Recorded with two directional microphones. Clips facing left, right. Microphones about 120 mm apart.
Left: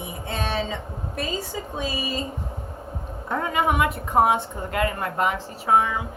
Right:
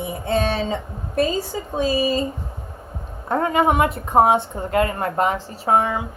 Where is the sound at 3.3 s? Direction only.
35° right (ahead or behind).